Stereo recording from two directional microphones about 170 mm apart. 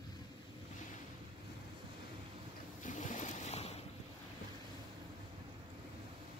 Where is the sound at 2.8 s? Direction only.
50° left (ahead or behind).